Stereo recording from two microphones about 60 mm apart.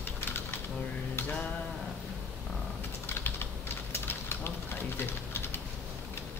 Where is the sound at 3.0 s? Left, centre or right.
Left.